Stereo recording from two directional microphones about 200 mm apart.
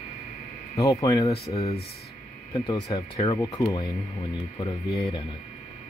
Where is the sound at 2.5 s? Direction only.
20° left (ahead or behind).